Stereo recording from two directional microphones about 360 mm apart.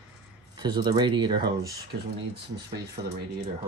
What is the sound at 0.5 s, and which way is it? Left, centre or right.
Speech, centre.